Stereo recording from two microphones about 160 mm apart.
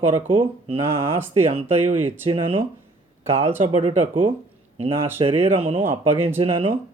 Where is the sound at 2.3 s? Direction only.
35° right (ahead or behind).